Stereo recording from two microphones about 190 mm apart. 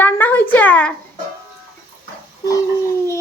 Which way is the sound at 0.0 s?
10° left (ahead or behind).